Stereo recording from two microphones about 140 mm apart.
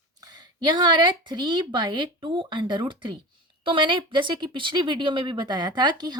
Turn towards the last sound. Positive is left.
turn(degrees=-30)  # may be behind; listen again after turning